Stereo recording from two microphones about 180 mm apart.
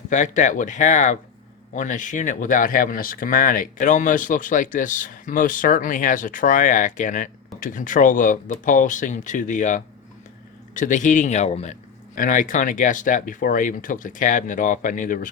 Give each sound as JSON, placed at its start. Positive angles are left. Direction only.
{"t": 0.1, "sound": "speech", "side_deg": 45}
{"t": 12.1, "sound": "speech", "side_deg": 50}